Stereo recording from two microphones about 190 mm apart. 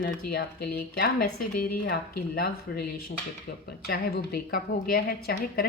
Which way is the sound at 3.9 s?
55° left (ahead or behind).